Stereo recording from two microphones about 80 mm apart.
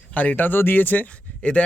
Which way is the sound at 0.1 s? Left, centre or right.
Centre.